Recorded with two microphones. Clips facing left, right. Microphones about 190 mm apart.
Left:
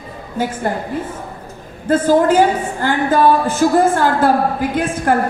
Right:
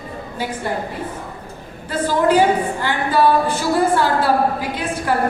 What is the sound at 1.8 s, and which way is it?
A woman's voice, 45° left (ahead or behind).